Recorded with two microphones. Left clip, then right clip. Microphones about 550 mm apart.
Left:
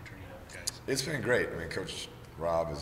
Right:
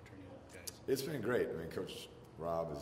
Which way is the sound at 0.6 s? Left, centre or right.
Left.